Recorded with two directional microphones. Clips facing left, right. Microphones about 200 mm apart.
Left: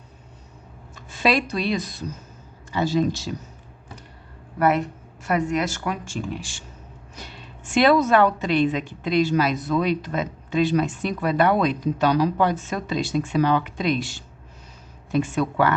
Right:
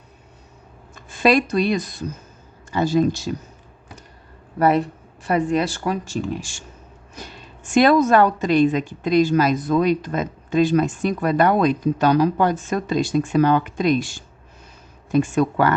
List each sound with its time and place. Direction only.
1.1 s a woman's voice: 50° right (ahead or behind)
5.2 s a woman's voice: 30° right (ahead or behind)